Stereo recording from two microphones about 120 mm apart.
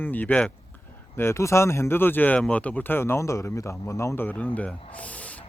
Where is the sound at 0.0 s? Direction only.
15° left (ahead or behind).